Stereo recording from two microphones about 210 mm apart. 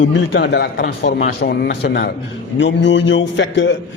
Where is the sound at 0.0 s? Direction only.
55° left (ahead or behind).